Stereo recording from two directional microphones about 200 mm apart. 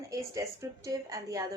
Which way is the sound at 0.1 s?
15° right (ahead or behind).